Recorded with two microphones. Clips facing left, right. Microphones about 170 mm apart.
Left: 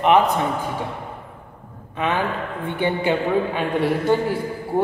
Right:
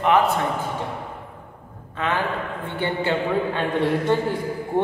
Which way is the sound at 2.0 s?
15° left (ahead or behind).